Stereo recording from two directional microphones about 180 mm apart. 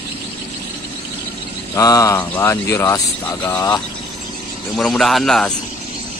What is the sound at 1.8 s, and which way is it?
Speech, 20° left (ahead or behind).